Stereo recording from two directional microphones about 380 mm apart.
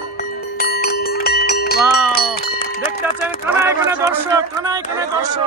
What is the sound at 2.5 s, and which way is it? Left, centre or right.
Speech, centre.